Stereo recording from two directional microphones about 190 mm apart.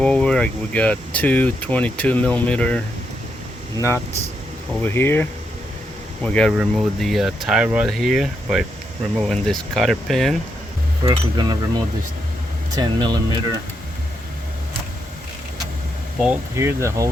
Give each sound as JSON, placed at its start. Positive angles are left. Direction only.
{"t": 0.0, "sound": "speech", "side_deg": 5}
{"t": 11.0, "sound": "speech", "side_deg": -20}
{"t": 16.2, "sound": "speech", "side_deg": -10}